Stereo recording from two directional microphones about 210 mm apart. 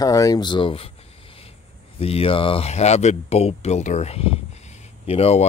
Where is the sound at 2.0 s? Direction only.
25° left (ahead or behind).